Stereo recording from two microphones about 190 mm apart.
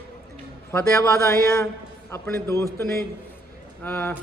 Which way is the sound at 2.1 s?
15° left (ahead or behind).